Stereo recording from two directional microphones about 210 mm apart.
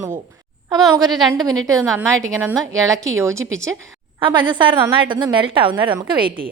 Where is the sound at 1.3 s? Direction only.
15° right (ahead or behind).